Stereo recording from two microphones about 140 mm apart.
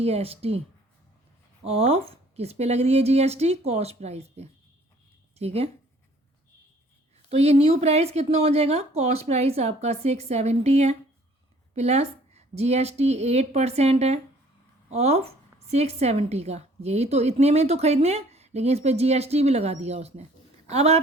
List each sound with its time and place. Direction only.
0.0 s a woman's voice: 45° right (ahead or behind)
1.6 s a woman's voice: 45° right (ahead or behind)
7.3 s a woman's voice: 45° right (ahead or behind)